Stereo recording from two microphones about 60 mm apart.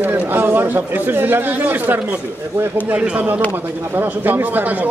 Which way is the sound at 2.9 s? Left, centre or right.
Centre.